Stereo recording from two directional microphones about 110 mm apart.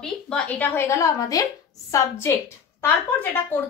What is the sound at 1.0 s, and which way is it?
A woman's voice, 30° left (ahead or behind).